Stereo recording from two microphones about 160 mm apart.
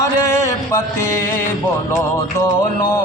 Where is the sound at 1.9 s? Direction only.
15° left (ahead or behind).